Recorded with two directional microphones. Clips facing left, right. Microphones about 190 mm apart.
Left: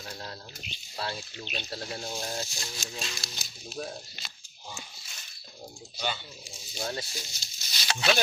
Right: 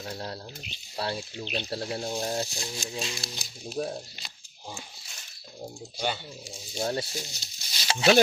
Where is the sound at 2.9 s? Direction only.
20° right (ahead or behind).